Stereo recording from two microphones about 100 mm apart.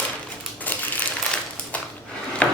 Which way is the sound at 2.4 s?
15° left (ahead or behind).